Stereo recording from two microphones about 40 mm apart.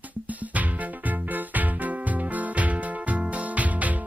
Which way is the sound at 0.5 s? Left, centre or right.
Right.